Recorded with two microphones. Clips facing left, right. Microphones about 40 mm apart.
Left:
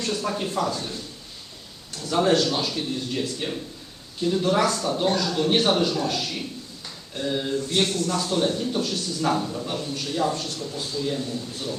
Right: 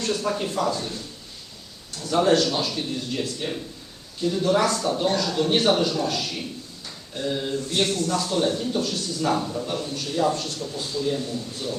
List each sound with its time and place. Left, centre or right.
0.0 s a man's voice: centre
2.0 s a man's voice: centre